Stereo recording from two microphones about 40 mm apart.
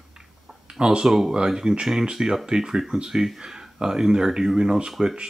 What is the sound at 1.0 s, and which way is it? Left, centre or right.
Speech, centre.